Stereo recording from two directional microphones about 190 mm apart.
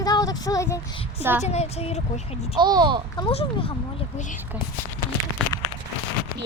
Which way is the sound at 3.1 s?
30° left (ahead or behind).